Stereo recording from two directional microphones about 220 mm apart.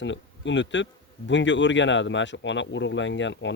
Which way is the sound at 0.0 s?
55° left (ahead or behind).